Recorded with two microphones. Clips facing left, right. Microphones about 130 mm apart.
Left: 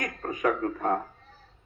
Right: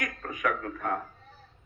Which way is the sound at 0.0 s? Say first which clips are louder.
Left 4 dB; 30° left (ahead or behind).